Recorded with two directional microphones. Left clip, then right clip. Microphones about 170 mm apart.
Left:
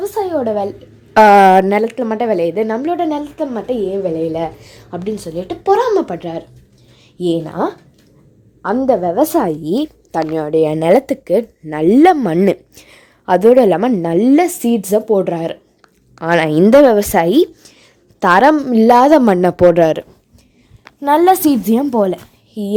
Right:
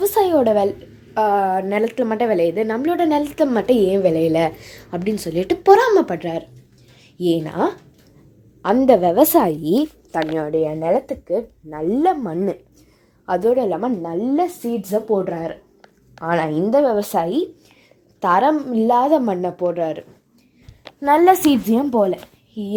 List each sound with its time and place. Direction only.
0.0 s a sound: 25° right (ahead or behind)
1.1 s speech: 80° left
1.8 s speech: 15° left (ahead or behind)
2.9 s a woman's voice: 5° left (ahead or behind)
3.2 s a woman's voice: 25° right (ahead or behind)
4.6 s a woman's voice: 5° left (ahead or behind)
7.2 s speech: 15° left (ahead or behind)
8.6 s a woman's voice: 5° right (ahead or behind)
10.1 s speech: 20° left (ahead or behind)
10.7 s speech: 60° left (ahead or behind)
13.2 s a woman's voice: 40° left (ahead or behind)
15.0 s a woman's voice: 35° left (ahead or behind)
17.0 s a woman's voice: 25° left (ahead or behind); by 20.1 s 55° left (ahead or behind)
21.0 s a woman's voice: 40° left (ahead or behind); by 22.7 s 60° left (ahead or behind)